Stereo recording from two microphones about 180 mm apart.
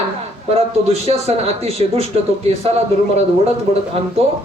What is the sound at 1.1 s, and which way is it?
Speech, 35° right (ahead or behind).